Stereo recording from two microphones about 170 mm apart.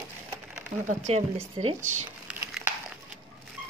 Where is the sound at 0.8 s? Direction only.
40° right (ahead or behind).